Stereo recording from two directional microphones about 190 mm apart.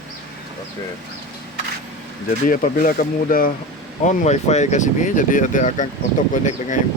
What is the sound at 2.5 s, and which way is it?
Speech, 45° left (ahead or behind).